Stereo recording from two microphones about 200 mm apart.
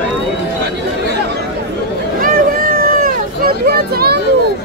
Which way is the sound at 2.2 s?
45° right (ahead or behind).